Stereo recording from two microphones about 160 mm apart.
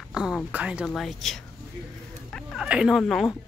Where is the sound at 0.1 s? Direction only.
5° right (ahead or behind).